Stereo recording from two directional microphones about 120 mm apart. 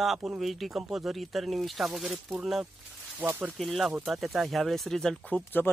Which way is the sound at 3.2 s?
15° right (ahead or behind).